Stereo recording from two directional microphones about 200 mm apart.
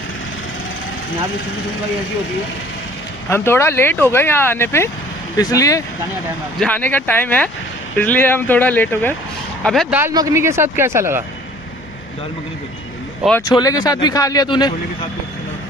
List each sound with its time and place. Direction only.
3.3 s speech: 10° left (ahead or behind)
9.9 s speech: 15° right (ahead or behind)
13.5 s speech: 20° left (ahead or behind)